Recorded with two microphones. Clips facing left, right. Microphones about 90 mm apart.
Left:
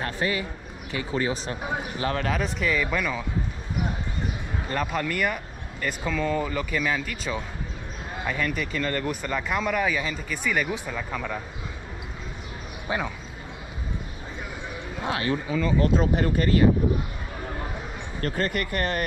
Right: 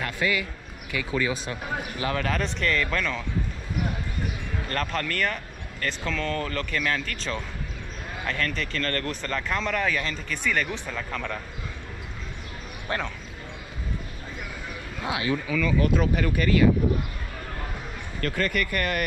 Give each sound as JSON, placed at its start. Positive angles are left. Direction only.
{"t": 0.0, "sound": "speech", "side_deg": 35}
{"t": 1.6, "sound": "speech", "side_deg": 15}
{"t": 2.0, "sound": "speech", "side_deg": 5}
{"t": 4.6, "sound": "speech", "side_deg": 10}
{"t": 12.8, "sound": "speech", "side_deg": 10}
{"t": 15.3, "sound": "speech", "side_deg": 25}
{"t": 18.2, "sound": "speech", "side_deg": 25}